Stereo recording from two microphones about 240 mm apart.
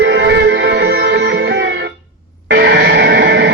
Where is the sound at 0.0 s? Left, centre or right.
Right.